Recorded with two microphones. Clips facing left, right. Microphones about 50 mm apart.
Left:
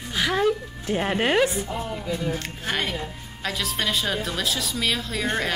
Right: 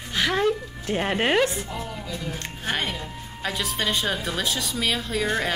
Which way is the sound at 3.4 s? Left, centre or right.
Centre.